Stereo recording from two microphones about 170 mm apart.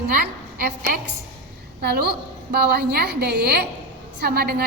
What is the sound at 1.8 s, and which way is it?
A woman's voice, 70° right (ahead or behind).